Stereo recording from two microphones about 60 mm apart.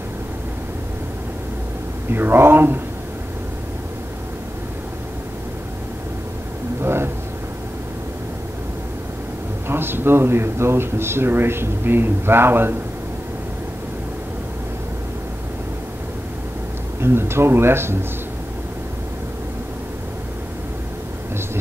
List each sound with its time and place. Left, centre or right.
2.0 s speech: right
6.8 s a sound: right
9.7 s speech: right
17.0 s speech: right